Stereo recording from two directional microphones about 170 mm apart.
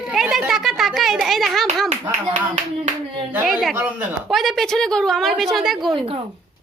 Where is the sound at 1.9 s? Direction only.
40° right (ahead or behind).